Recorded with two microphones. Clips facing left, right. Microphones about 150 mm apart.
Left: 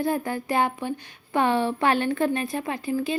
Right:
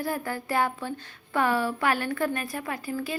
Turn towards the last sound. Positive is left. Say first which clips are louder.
# left 5 dB
turn(degrees=20)  # may be behind; listen again after turning